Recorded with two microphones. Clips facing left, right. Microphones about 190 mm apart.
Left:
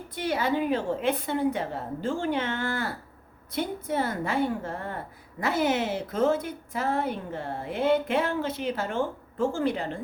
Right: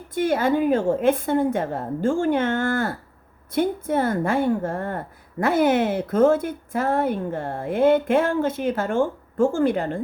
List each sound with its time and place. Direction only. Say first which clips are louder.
0.1 s a woman's voice: right 7 dB; 50° right (ahead or behind)